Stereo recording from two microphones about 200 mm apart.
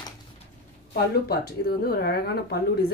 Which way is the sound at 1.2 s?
50° left (ahead or behind).